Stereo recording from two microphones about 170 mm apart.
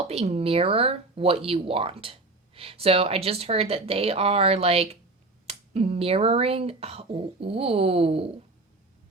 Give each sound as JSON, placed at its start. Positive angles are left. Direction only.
{"t": 0.1, "sound": "speech", "side_deg": -35}